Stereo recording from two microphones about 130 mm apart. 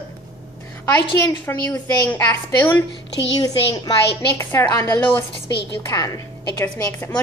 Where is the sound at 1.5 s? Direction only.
20° left (ahead or behind).